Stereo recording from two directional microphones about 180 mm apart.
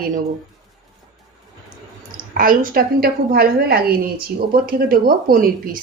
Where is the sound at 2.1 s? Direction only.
50° right (ahead or behind).